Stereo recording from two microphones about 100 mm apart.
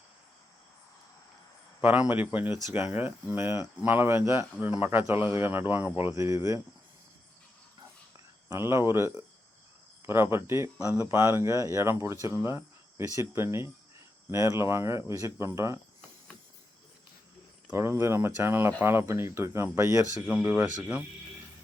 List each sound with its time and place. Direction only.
1.8 s a man's voice: 15° right (ahead or behind)
8.4 s a man's voice: 25° right (ahead or behind)
12.4 s cricket: 25° right (ahead or behind)
13.1 s a man's voice: 25° right (ahead or behind)
17.7 s a man's voice: 30° right (ahead or behind)
20.2 s speech: 15° right (ahead or behind)